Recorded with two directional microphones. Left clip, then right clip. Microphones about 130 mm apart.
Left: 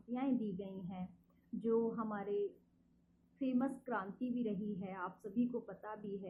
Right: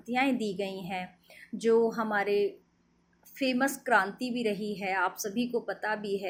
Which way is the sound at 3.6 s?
40° right (ahead or behind).